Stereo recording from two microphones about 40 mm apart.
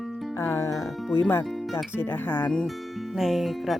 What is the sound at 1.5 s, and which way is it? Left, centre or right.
Music, centre.